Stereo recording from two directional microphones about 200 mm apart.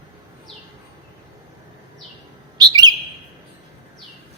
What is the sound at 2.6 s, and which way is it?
Bird, 20° right (ahead or behind).